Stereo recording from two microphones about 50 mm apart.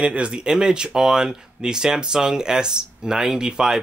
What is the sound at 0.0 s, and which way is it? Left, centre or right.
Speech, right.